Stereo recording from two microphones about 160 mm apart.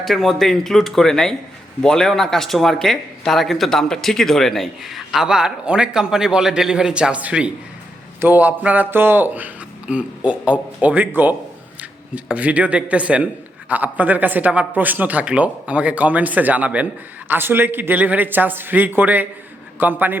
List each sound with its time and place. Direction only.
0.0 s speech: centre (ahead or behind)